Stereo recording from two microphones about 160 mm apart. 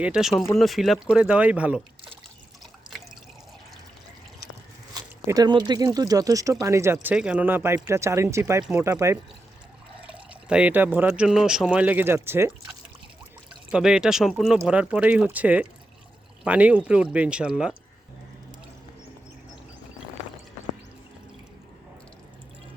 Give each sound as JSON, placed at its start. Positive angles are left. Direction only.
{"t": 0.0, "sound": "speech", "side_deg": -5}
{"t": 4.9, "sound": "speech", "side_deg": -20}
{"t": 10.0, "sound": "speech", "side_deg": -10}
{"t": 13.7, "sound": "speech", "side_deg": -5}